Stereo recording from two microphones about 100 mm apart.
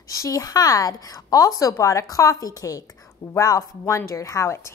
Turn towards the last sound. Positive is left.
turn(degrees=30)  # may be behind; listen again after turning